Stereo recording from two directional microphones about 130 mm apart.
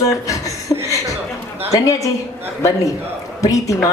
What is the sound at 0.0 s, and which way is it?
Chuckle, 25° left (ahead or behind).